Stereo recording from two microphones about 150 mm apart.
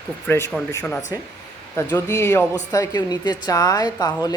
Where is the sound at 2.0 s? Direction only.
15° left (ahead or behind).